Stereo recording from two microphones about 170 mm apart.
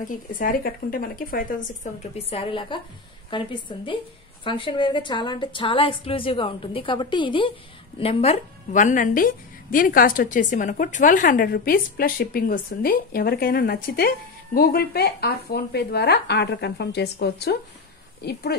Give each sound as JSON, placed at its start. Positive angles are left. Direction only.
{"t": 0.0, "sound": "a woman's voice", "side_deg": 55}
{"t": 2.2, "sound": "a woman's voice", "side_deg": 35}